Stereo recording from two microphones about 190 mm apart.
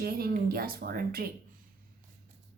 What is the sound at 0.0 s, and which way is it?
A woman's voice, 55° right (ahead or behind).